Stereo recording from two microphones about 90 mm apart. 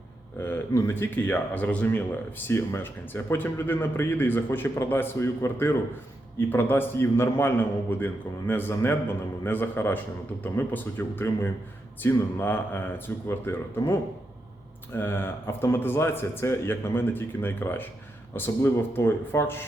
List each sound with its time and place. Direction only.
0.4 s a man's voice: 25° left (ahead or behind)
2.5 s a man's voice: 25° left (ahead or behind)